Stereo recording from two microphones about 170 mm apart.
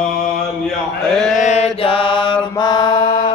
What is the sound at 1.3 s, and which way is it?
Mantra, 45° left (ahead or behind).